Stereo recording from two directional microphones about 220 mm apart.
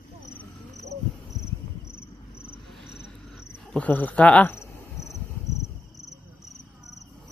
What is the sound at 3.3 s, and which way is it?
Cricket, centre (ahead or behind).